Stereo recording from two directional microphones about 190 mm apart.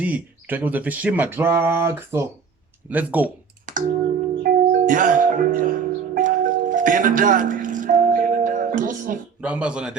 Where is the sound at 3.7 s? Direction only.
45° right (ahead or behind).